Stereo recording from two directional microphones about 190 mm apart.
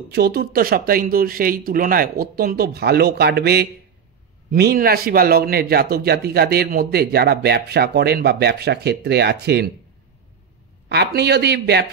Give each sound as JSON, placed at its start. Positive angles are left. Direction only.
{"t": 0.1, "sound": "speech", "side_deg": -55}
{"t": 10.9, "sound": "speech", "side_deg": -60}